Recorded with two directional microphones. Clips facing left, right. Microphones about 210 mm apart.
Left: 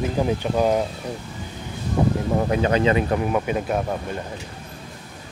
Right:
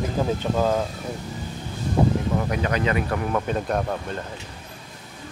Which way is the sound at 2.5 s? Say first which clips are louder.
Left 7 dB; 25° left (ahead or behind).